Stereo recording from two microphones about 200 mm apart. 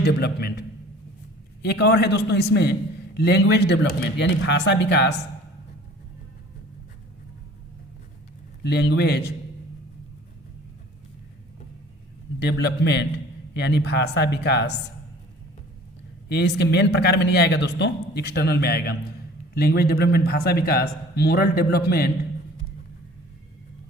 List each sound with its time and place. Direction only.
0.0 s a man's voice: 55° left (ahead or behind)
1.6 s a man's voice: 55° left (ahead or behind)
8.6 s a man's voice: 55° left (ahead or behind)
12.4 s a man's voice: 55° left (ahead or behind)
16.3 s a man's voice: 55° left (ahead or behind)